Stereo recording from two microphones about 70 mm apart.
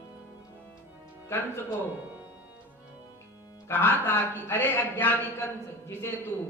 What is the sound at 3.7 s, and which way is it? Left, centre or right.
A man's voice, left.